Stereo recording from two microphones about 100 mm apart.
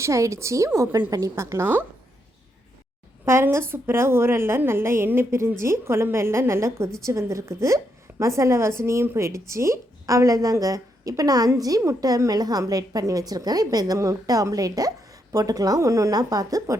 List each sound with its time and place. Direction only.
0.0 s a woman's voice: 30° right (ahead or behind)
3.2 s a woman's voice: 25° right (ahead or behind)